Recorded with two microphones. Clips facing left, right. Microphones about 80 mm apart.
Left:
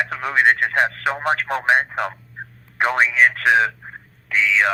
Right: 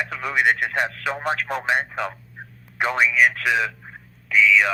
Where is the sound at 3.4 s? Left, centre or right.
Left.